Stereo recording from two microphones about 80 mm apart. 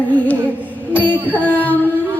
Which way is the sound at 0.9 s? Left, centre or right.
Left.